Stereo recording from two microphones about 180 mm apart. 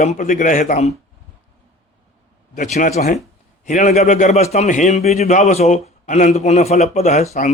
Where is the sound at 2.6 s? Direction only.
45° left (ahead or behind).